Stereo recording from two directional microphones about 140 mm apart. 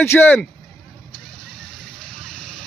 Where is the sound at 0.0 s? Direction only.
15° left (ahead or behind).